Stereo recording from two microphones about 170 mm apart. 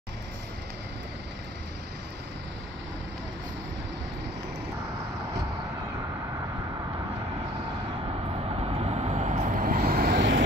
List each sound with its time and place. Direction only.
8.6 s vehicle: 35° right (ahead or behind); by 10.4 s 90° right